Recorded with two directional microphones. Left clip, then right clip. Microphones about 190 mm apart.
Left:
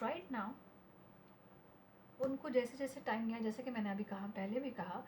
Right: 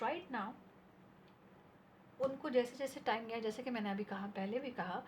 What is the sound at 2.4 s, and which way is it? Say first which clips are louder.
A woman's voice: right 2 dB; 35° right (ahead or behind).